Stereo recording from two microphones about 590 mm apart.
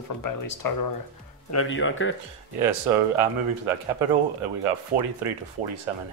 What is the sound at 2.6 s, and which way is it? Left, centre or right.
Speech, right.